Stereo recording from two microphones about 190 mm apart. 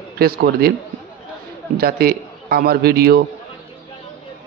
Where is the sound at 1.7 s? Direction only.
50° right (ahead or behind).